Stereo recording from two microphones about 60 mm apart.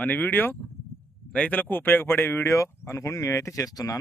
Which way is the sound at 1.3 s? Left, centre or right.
Left.